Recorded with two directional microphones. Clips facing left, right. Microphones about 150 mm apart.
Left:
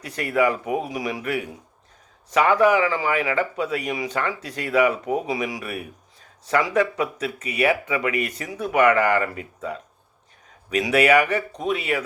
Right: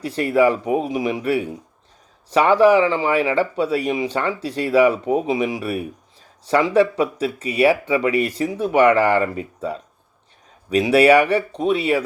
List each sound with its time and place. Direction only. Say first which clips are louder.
0.0 s speech: right 5 dB; 30° right (ahead or behind)